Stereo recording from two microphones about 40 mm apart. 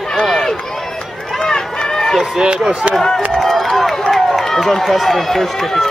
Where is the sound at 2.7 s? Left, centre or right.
Right.